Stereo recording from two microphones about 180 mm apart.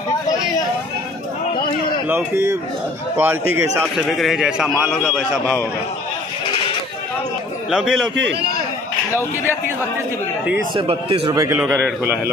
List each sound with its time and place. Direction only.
2.0 s a man's voice: 15° right (ahead or behind)
3.8 s a man's voice: centre (ahead or behind)
7.7 s a man's voice: 5° right (ahead or behind)
8.2 s a man's voice: 70° right (ahead or behind)
10.7 s a man's voice: 30° right (ahead or behind)
11.3 s a man's voice: 15° right (ahead or behind)